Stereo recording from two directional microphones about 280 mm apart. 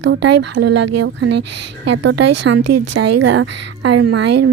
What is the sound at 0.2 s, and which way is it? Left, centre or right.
Speech, right.